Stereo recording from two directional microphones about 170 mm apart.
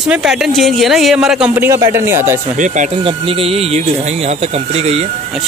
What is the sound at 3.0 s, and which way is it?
Speech, 30° right (ahead or behind).